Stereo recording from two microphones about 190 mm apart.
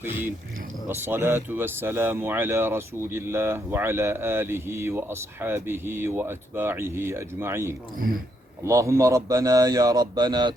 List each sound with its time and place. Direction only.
0.0 s a man's voice: 10° right (ahead or behind)